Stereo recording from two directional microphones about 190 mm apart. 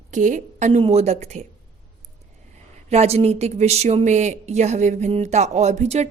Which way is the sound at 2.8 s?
35° right (ahead or behind).